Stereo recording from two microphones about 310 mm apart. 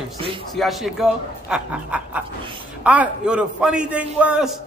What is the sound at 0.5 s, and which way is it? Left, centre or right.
A man's voice, centre.